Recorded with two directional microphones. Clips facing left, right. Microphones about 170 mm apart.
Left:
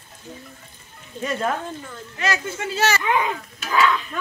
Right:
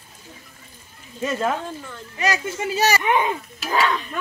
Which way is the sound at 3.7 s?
30° right (ahead or behind).